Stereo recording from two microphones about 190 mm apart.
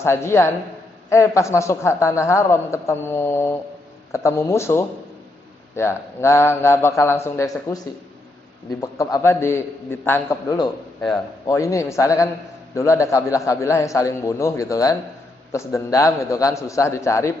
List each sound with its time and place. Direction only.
0.0 s a man's voice: 15° left (ahead or behind)
9.1 s a man's voice: 15° left (ahead or behind)